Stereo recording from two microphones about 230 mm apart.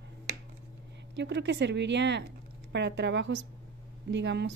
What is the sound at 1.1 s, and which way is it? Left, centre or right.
Speech, right.